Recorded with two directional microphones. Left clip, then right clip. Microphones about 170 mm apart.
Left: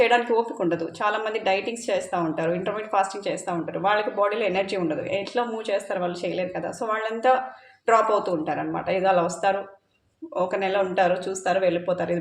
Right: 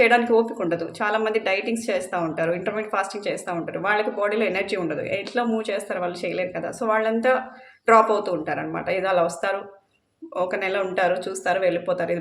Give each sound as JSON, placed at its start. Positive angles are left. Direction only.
{"t": 0.0, "sound": "a woman's voice", "side_deg": -20}